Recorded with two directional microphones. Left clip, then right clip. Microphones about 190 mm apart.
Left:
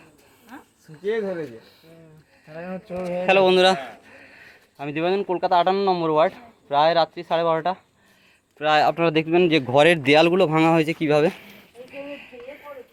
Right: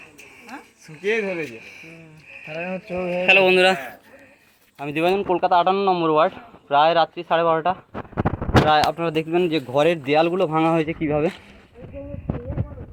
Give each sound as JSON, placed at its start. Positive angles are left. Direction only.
{"t": 0.5, "sound": "a sound", "side_deg": -30}
{"t": 1.0, "sound": "speech", "side_deg": -25}
{"t": 2.6, "sound": "a sound", "side_deg": -35}
{"t": 3.2, "sound": "speech", "side_deg": 5}
{"t": 4.8, "sound": "speech", "side_deg": 0}
{"t": 8.6, "sound": "speech", "side_deg": 70}
{"t": 9.1, "sound": "speech", "side_deg": 45}